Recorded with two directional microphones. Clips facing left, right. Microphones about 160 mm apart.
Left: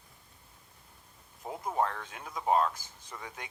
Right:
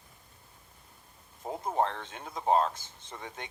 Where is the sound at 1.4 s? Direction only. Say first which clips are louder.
Right 2 dB; 30° right (ahead or behind).